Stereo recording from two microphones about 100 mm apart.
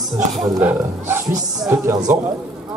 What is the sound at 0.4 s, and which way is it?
Speech, 10° right (ahead or behind).